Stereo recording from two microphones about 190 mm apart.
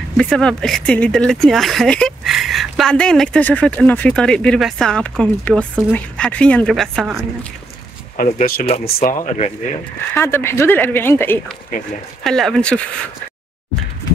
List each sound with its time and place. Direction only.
0.2 s speech: 5° left (ahead or behind)
8.2 s speech: 45° left (ahead or behind)
10.1 s a woman's voice: 10° left (ahead or behind)